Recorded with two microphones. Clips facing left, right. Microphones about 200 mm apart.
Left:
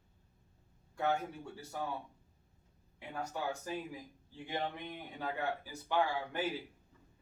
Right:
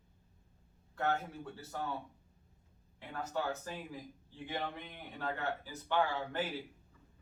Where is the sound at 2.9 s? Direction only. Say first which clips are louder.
Right 2 dB; 15° left (ahead or behind).